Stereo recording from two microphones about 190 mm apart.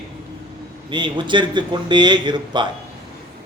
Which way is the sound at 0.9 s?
25° right (ahead or behind).